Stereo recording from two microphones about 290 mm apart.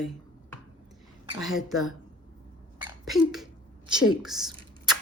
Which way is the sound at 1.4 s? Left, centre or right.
Centre.